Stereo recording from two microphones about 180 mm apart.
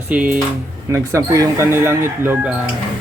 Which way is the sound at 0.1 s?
10° right (ahead or behind).